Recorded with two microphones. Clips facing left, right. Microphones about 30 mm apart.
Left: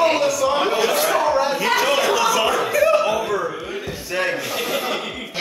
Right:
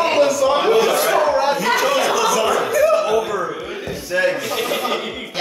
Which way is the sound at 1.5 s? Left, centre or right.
Centre.